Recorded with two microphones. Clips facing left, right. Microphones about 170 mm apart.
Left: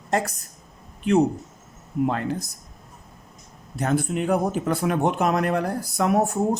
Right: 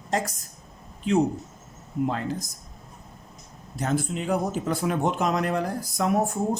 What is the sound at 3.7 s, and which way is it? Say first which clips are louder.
Speech: left 3 dB; 60° left (ahead or behind).